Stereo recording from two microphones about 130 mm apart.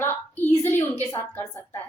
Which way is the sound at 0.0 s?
15° left (ahead or behind).